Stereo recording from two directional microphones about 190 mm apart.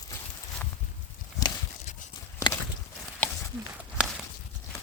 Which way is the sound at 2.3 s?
15° left (ahead or behind).